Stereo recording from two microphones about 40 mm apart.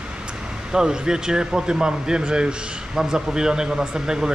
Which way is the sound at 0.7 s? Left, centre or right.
Centre.